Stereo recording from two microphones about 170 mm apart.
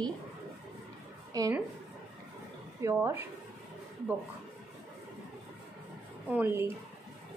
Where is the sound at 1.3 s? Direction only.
20° right (ahead or behind).